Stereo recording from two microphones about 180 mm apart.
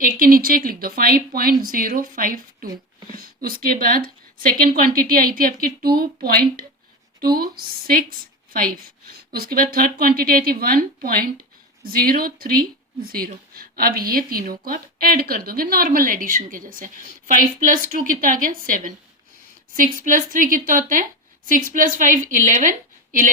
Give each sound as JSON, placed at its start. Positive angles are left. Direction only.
{"t": 0.0, "sound": "speech", "side_deg": -50}